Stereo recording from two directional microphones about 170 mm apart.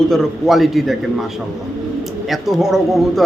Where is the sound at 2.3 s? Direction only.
Centre (ahead or behind).